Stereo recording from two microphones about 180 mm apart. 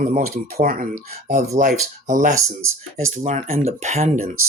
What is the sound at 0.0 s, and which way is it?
Speech, 50° right (ahead or behind).